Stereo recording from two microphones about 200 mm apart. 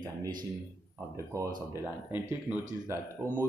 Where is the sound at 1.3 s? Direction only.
15° right (ahead or behind).